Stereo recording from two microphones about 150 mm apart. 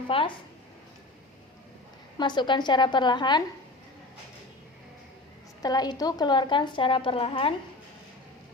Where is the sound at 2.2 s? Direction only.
30° left (ahead or behind).